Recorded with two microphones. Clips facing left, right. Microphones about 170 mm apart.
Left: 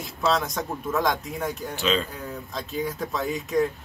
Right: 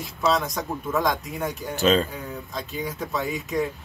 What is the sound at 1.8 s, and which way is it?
Speech, 45° right (ahead or behind).